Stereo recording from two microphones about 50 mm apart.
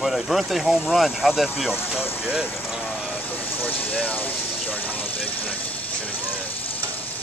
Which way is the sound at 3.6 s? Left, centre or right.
Left.